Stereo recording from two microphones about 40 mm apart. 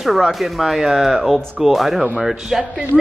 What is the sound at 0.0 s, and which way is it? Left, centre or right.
A woman's voice, centre.